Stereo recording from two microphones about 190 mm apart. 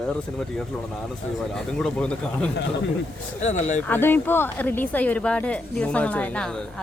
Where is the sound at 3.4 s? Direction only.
40° left (ahead or behind).